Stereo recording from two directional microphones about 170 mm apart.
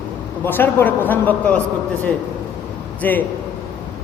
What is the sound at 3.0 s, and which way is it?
Speech, 10° left (ahead or behind).